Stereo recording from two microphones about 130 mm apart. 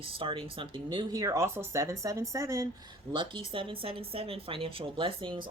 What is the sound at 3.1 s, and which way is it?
Speech, 40° right (ahead or behind).